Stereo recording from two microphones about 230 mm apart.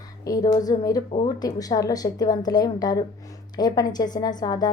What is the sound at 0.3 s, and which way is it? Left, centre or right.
A woman's voice, centre.